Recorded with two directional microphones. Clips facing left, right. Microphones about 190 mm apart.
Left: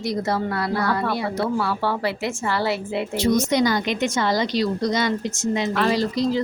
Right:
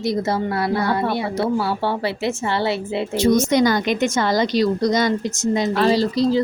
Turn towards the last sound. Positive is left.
turn(degrees=-30)  # may be behind; listen again after turning